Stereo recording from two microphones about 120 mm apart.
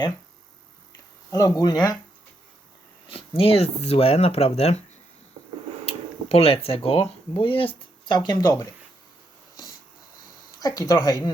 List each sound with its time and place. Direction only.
1.3 s speech: 30° left (ahead or behind)
3.1 s speech: 50° left (ahead or behind)
5.8 s speech: 50° left (ahead or behind); by 8.6 s 35° left (ahead or behind)
10.6 s speech: 35° left (ahead or behind)